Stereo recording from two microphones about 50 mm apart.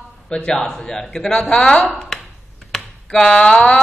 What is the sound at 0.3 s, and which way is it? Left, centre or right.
A man's voice, centre.